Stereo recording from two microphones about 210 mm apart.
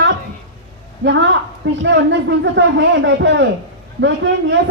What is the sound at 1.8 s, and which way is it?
Speech, 60° right (ahead or behind).